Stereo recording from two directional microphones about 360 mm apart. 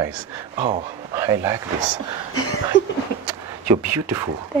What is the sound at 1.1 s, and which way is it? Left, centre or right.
Speech, centre.